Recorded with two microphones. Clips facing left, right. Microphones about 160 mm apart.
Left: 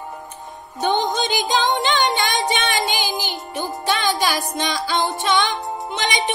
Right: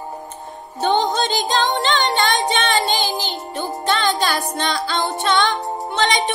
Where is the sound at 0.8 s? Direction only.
15° left (ahead or behind).